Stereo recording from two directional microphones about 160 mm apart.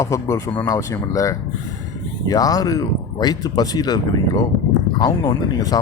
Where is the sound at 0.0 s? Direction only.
20° left (ahead or behind).